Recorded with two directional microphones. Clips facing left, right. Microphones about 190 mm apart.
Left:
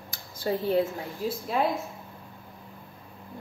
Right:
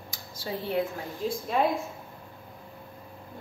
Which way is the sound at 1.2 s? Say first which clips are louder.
Even; 5° left (ahead or behind).